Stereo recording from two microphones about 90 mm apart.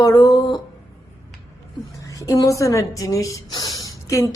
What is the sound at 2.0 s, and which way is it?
A woman's voice, 40° left (ahead or behind).